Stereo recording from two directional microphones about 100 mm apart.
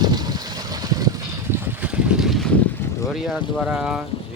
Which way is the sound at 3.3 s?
Centre (ahead or behind).